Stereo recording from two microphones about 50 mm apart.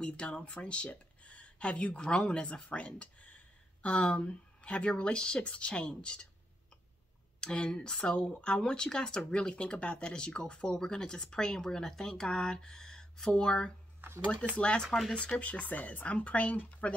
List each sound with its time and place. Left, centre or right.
0.0 s speech: left
7.3 s speech: centre
14.9 s speech: centre
15.1 s speech: left